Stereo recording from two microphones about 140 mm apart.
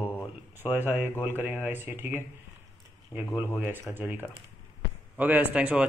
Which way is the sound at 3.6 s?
15° right (ahead or behind).